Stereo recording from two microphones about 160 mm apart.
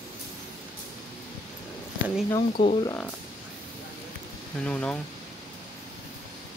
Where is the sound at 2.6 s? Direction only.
30° left (ahead or behind).